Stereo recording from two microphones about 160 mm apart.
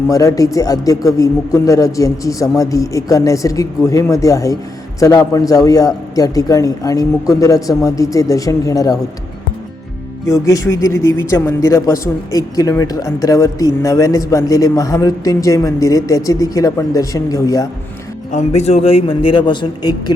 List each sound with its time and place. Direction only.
0.1 s speech: 20° left (ahead or behind)
10.2 s speech: 20° left (ahead or behind)
18.3 s a man's voice: 45° left (ahead or behind); by 20.1 s 25° left (ahead or behind)